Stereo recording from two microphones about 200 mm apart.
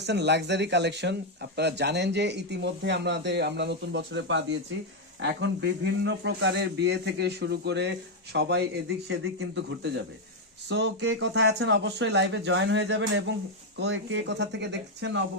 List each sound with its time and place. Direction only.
0.0 s speech: 60° right (ahead or behind)